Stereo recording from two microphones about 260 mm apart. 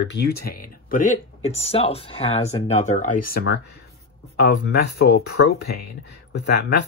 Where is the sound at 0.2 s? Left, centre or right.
Left.